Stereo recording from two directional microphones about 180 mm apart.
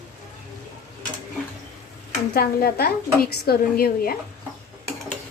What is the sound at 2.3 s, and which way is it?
A woman's voice, 55° left (ahead or behind).